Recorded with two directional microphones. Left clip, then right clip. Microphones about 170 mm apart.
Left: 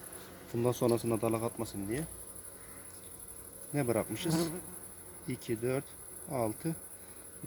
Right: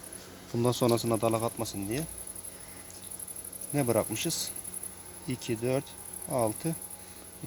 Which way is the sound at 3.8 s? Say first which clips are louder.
Right 5 dB; 30° right (ahead or behind).